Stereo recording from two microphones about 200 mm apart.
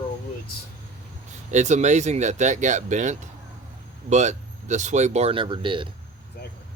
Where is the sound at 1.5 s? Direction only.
35° right (ahead or behind).